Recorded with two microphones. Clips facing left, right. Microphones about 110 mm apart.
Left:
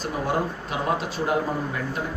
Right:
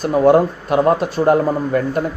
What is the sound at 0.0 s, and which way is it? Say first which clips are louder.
A man's voice: right 13 dB; 55° right (ahead or behind).